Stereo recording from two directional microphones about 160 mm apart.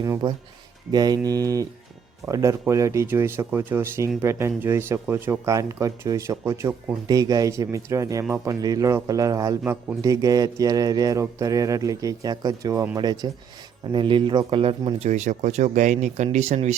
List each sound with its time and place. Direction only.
0.0 s speech: 25° right (ahead or behind); by 16.7 s 45° right (ahead or behind)